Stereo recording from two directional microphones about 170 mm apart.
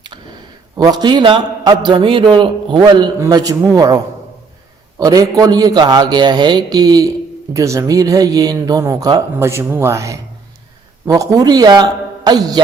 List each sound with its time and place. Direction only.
0.8 s a man's voice: 25° right (ahead or behind)